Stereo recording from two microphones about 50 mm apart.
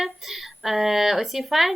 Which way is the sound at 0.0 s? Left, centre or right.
Centre.